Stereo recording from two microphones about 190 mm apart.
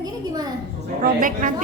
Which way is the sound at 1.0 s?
45° right (ahead or behind).